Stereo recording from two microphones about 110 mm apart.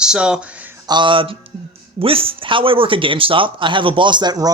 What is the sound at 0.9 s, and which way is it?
Speech, 45° right (ahead or behind).